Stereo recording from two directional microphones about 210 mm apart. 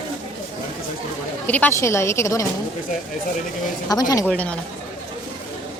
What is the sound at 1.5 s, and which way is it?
A woman's voice, 10° left (ahead or behind).